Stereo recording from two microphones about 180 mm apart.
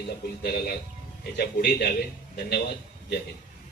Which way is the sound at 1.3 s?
60° left (ahead or behind).